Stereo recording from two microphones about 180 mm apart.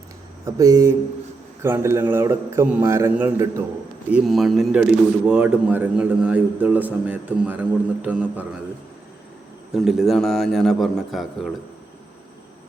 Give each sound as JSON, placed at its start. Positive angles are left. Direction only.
{"t": 0.4, "sound": "a man's voice", "side_deg": -15}
{"t": 4.1, "sound": "a man's voice", "side_deg": 0}
{"t": 9.7, "sound": "a man's voice", "side_deg": 0}